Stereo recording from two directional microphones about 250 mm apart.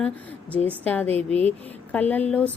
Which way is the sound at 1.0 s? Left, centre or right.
Right.